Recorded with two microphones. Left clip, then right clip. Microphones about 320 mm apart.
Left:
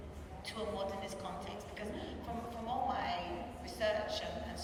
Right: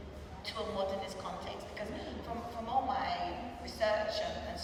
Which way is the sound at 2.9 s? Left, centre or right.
Centre.